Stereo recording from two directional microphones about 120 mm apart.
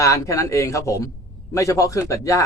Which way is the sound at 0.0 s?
25° left (ahead or behind).